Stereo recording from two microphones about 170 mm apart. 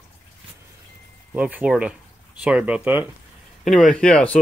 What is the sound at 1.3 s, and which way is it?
Speech, 10° right (ahead or behind).